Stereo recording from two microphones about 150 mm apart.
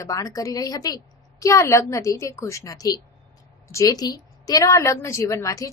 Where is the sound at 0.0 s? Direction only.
20° left (ahead or behind).